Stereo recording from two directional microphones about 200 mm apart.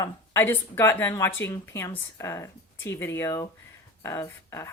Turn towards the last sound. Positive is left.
turn(degrees=15)  # may be behind; listen again after turning